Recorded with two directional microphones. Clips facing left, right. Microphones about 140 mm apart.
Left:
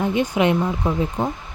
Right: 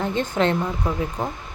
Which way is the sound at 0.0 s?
15° left (ahead or behind).